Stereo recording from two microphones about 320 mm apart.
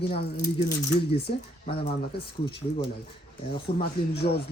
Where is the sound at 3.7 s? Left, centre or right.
Left.